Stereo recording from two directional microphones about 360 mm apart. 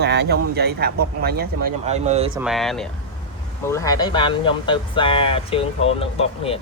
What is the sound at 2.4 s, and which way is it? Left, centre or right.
Speech, centre.